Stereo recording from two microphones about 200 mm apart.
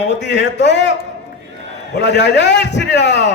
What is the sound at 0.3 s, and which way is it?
Speech, 60° left (ahead or behind).